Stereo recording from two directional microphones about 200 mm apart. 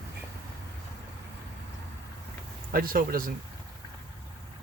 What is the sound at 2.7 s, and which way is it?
Speech, 45° right (ahead or behind).